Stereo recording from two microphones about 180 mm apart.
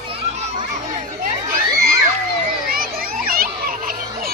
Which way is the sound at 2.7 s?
55° right (ahead or behind).